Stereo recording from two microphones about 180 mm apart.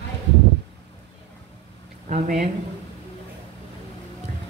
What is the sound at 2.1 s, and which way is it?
Speech, 45° right (ahead or behind).